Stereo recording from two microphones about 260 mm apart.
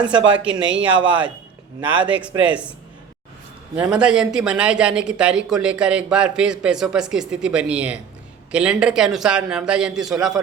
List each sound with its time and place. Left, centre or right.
0.6 s speech: right
1.0 s speech: centre
3.8 s speech: centre